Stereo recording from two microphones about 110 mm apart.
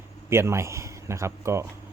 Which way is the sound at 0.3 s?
25° right (ahead or behind).